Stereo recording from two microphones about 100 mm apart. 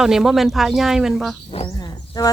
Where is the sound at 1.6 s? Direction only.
40° left (ahead or behind).